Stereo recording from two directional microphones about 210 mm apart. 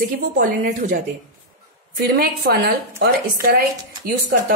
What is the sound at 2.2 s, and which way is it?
A woman's voice, 50° right (ahead or behind).